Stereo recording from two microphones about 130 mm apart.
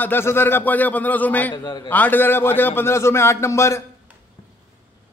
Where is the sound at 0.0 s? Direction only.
20° left (ahead or behind).